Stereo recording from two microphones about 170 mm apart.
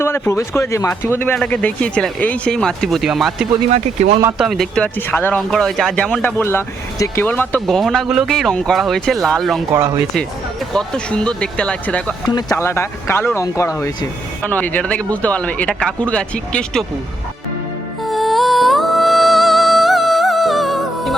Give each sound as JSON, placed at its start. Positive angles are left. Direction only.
{"t": 0.0, "sound": "speech", "side_deg": 15}
{"t": 3.7, "sound": "speech", "side_deg": -45}
{"t": 4.4, "sound": "speech", "side_deg": 0}
{"t": 9.7, "sound": "speech", "side_deg": -15}
{"t": 10.8, "sound": "speech", "side_deg": 5}
{"t": 12.3, "sound": "speech", "side_deg": 20}
{"t": 18.0, "sound": "music", "side_deg": 0}